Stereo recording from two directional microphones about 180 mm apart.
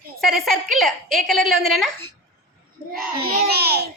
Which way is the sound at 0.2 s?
Centre (ahead or behind).